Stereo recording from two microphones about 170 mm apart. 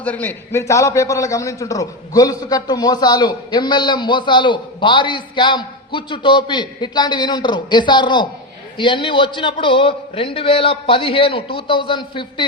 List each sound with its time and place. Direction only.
0.0 s a man's voice: 10° left (ahead or behind); by 12.5 s 30° left (ahead or behind)